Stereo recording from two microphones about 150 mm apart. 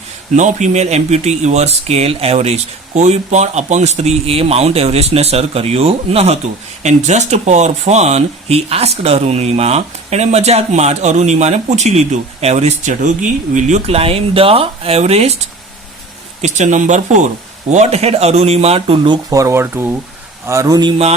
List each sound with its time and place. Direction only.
0.3 s a man's voice: 55° right (ahead or behind)
16.4 s a man's voice: 55° right (ahead or behind); by 20.9 s 25° right (ahead or behind)